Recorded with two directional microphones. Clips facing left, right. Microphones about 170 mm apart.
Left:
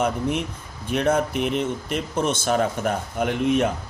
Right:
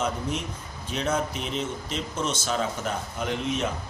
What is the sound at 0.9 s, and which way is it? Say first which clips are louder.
Speech: left 6 dB; 55° left (ahead or behind).